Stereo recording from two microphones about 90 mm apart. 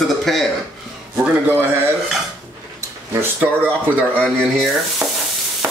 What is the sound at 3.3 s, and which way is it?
Speech, 20° right (ahead or behind).